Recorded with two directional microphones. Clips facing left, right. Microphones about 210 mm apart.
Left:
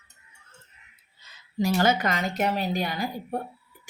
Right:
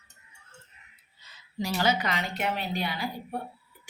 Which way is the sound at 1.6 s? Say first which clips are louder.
Left 4 dB; 50° left (ahead or behind).